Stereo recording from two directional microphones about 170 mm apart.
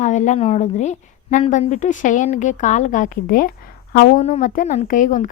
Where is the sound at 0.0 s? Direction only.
45° left (ahead or behind).